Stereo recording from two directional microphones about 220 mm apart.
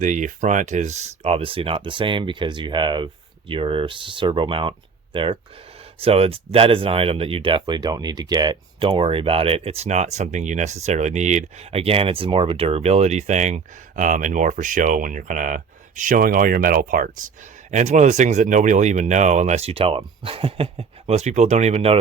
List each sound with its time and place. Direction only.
0.0 s speech: 35° right (ahead or behind)